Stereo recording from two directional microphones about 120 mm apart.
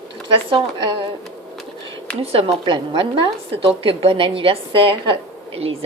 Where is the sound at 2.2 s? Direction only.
55° right (ahead or behind).